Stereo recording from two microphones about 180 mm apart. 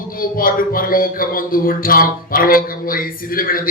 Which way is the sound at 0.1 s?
50° left (ahead or behind).